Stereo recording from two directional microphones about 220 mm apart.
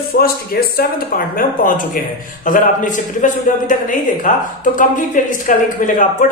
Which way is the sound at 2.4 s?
35° left (ahead or behind).